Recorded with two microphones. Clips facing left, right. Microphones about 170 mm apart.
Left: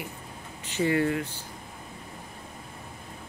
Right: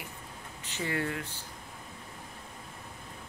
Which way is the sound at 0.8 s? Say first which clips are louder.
Left 10 dB; 30° left (ahead or behind).